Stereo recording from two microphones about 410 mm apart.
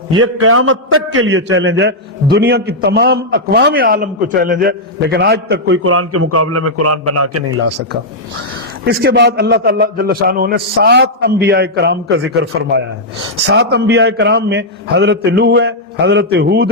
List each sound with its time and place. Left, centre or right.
0.2 s a man's voice: right
8.8 s a man's voice: right